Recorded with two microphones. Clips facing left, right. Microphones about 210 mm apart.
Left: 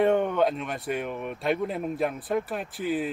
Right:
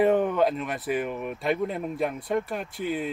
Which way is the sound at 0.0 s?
Centre (ahead or behind).